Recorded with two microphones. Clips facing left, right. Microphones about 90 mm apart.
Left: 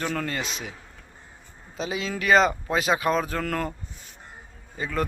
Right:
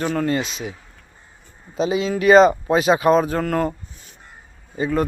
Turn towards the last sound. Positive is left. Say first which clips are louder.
# right 7 dB
turn(degrees=-20)  # may be behind; listen again after turning